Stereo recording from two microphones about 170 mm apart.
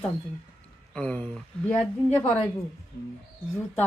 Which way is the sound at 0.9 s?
10° left (ahead or behind).